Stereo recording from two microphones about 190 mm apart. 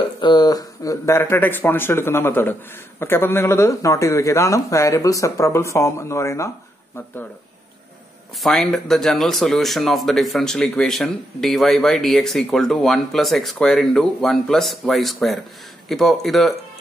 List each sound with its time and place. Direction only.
0.2 s speech: 20° left (ahead or behind)
8.4 s speech: centre (ahead or behind)